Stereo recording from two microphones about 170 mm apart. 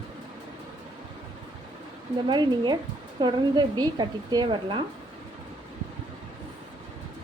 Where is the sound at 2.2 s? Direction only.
25° right (ahead or behind).